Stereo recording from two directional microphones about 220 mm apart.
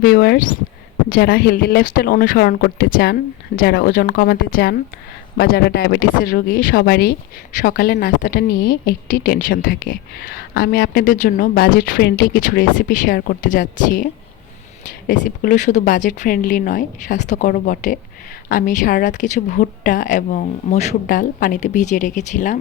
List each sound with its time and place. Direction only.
0.0 s speech: 45° left (ahead or behind)